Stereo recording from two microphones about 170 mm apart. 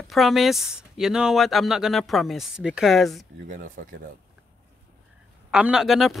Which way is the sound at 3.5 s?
50° right (ahead or behind).